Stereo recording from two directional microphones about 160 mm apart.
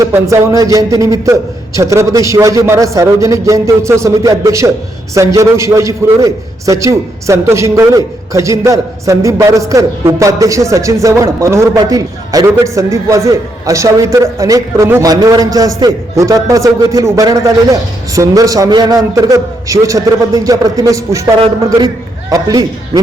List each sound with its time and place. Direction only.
0.0 s a man's voice: 20° right (ahead or behind)